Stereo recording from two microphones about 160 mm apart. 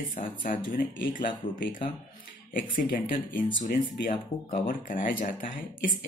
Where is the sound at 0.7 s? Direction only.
55° left (ahead or behind).